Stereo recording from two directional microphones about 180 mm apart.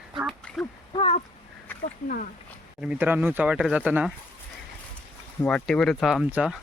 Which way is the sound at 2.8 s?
10° right (ahead or behind).